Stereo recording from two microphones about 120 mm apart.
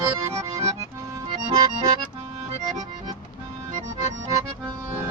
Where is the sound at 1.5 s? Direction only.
30° right (ahead or behind).